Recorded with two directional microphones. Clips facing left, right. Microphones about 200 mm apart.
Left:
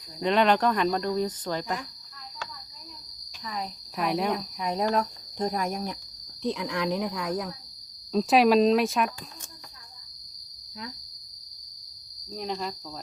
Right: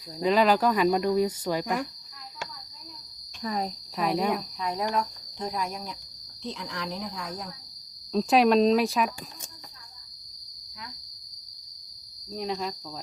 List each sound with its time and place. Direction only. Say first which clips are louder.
0.2 s speech: right 1 dB; 5° right (ahead or behind)
3.4 s speech: right 5 dB; 40° right (ahead or behind)
3.9 s speech: even; centre (ahead or behind)
4.6 s speech: left 4 dB; 25° left (ahead or behind)
4.9 s cricket: left 2 dB; 45° left (ahead or behind)
6.4 s speech: left 7 dB; 60° left (ahead or behind)
8.1 s speech: left 1 dB; centre (ahead or behind)
12.3 s speech: right 1 dB; centre (ahead or behind)